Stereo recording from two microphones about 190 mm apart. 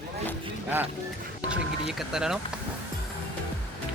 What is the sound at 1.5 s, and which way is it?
Speech, 5° right (ahead or behind).